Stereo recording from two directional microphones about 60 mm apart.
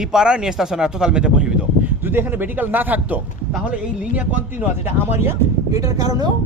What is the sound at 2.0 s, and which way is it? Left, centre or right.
Speech, right.